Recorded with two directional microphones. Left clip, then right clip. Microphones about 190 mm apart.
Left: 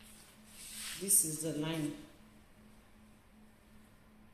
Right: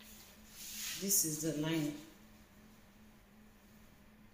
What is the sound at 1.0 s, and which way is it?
Speech, 30° left (ahead or behind).